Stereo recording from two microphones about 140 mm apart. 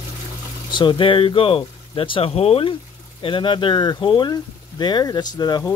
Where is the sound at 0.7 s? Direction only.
35° left (ahead or behind).